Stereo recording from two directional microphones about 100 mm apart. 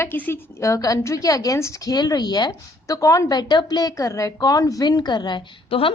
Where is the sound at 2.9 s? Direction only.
30° left (ahead or behind); by 5.4 s 45° left (ahead or behind).